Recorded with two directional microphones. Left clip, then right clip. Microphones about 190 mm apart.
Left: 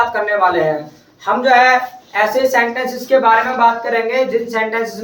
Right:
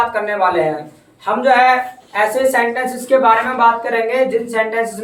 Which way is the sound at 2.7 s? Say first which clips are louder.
Even; 15° right (ahead or behind).